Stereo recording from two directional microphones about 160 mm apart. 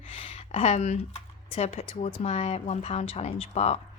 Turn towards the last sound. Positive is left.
turn(degrees=40)  # may be behind; listen again after turning